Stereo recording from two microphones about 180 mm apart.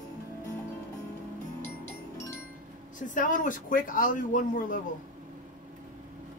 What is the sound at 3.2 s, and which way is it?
A man's voice, 45° left (ahead or behind).